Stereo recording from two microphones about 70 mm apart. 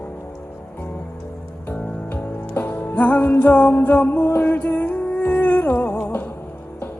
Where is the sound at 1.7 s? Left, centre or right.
Left.